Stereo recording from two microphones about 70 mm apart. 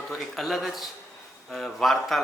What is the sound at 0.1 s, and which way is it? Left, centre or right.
Speech, centre.